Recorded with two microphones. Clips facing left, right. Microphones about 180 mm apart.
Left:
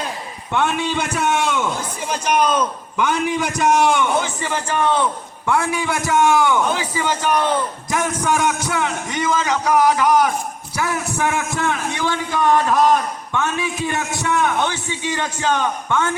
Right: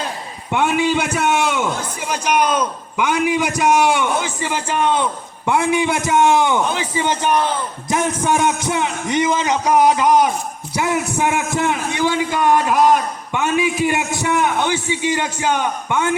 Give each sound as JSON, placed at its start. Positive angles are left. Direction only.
{"t": 0.7, "sound": "a man's voice", "side_deg": -5}
{"t": 3.0, "sound": "a man's voice", "side_deg": -5}
{"t": 4.4, "sound": "a man's voice", "side_deg": -15}